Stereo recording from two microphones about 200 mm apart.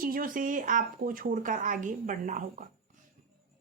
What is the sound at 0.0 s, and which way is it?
Speech, 45° right (ahead or behind).